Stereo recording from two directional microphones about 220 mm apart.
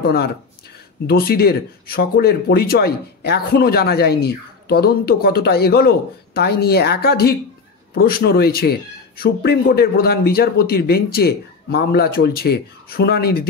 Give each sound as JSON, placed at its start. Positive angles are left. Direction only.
{"t": 0.0, "sound": "speech", "side_deg": 45}